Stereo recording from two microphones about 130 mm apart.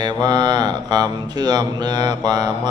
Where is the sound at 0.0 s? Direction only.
30° right (ahead or behind).